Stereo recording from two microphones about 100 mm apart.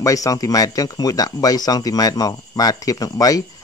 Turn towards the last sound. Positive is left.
turn(degrees=35)  # may be behind; listen again after turning